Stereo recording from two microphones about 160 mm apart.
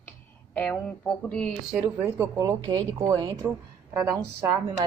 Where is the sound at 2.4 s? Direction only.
25° right (ahead or behind).